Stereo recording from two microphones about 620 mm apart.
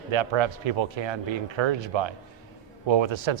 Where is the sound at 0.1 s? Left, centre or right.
Right.